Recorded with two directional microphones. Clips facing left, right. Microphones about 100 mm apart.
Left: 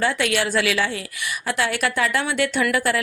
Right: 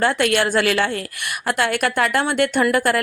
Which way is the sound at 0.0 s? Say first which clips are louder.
Right 3 dB; 50° right (ahead or behind).